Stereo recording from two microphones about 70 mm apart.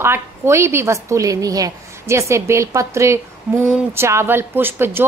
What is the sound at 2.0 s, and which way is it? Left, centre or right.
Speech, right.